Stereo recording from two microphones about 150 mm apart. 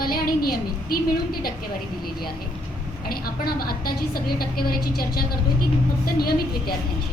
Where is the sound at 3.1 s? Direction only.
90° left.